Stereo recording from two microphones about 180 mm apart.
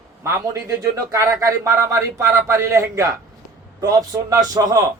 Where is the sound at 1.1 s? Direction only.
15° right (ahead or behind).